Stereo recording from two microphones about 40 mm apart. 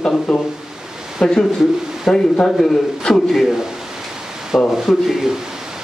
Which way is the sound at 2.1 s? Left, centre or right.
Centre.